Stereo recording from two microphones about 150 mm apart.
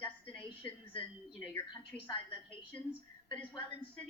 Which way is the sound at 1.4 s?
15° left (ahead or behind).